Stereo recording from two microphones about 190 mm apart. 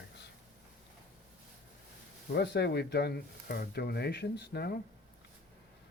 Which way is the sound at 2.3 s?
60° left (ahead or behind).